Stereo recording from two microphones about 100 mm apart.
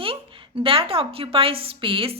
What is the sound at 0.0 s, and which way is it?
A woman's voice, 65° right (ahead or behind).